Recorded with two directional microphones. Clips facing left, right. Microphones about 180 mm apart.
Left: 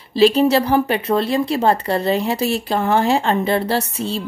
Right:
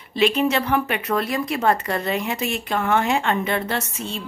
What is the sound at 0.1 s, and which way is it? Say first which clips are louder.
A woman's voice: left 6 dB; 35° left (ahead or behind).